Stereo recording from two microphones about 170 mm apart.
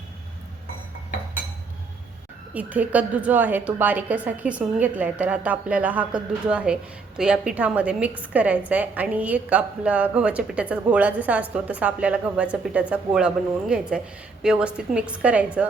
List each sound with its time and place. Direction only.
2.5 s a woman's voice: 10° right (ahead or behind)